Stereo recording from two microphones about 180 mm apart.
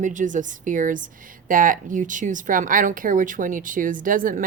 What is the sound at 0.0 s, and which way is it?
A woman's voice, 45° right (ahead or behind).